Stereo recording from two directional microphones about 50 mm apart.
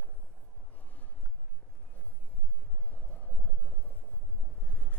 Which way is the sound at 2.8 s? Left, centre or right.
Left.